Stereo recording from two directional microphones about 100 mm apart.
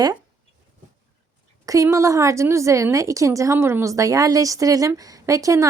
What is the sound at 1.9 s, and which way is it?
A woman's voice, 30° right (ahead or behind).